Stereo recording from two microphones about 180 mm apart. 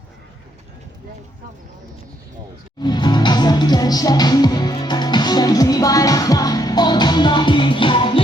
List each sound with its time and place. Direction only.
2.8 s music: 25° left (ahead or behind)